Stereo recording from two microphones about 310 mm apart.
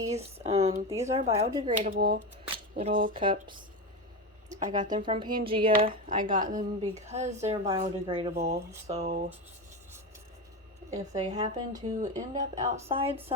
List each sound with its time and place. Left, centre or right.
0.4 s a woman's voice: centre
1.9 s speech: right
2.7 s a woman's voice: centre
4.9 s a woman's voice: centre
10.9 s a woman's voice: centre